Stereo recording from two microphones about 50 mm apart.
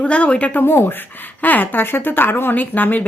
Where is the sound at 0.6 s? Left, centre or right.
Left.